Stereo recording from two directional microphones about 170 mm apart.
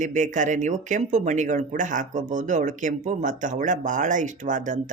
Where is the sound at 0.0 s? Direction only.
45° right (ahead or behind).